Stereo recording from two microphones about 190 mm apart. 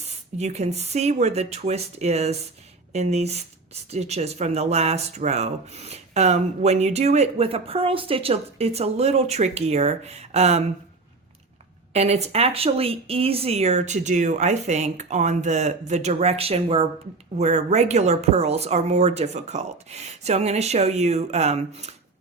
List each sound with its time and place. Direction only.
0.0 s speech: 35° right (ahead or behind)
11.9 s speech: 35° right (ahead or behind)